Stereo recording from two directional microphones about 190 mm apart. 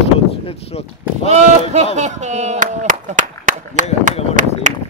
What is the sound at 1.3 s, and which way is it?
Speech, 35° right (ahead or behind).